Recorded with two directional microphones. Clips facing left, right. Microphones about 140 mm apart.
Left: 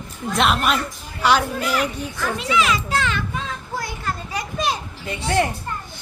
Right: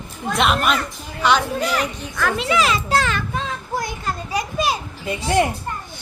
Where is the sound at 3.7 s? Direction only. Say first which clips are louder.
Right 2 dB; 20° right (ahead or behind).